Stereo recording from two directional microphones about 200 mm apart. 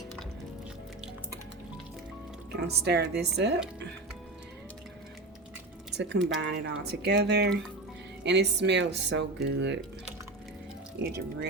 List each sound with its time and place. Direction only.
2.6 s speech: 55° right (ahead or behind)
6.0 s speech: 60° right (ahead or behind)